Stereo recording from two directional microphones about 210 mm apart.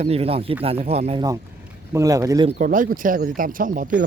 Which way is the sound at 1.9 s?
15° right (ahead or behind).